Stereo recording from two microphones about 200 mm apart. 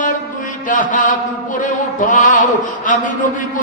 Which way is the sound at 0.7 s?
40° left (ahead or behind).